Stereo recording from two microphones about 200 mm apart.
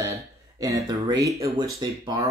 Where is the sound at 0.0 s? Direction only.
15° right (ahead or behind).